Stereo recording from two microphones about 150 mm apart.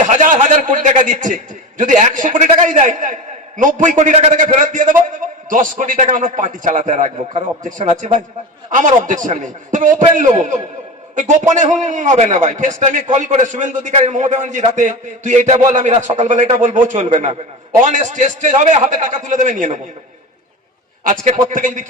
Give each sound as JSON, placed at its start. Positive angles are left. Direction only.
{"t": 0.1, "sound": "a man's voice", "side_deg": -55}
{"t": 21.0, "sound": "a man's voice", "side_deg": -55}